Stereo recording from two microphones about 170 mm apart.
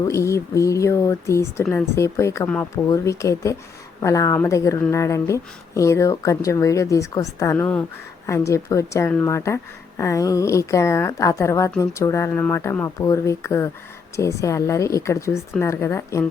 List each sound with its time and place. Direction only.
0.0 s speech: 15° left (ahead or behind)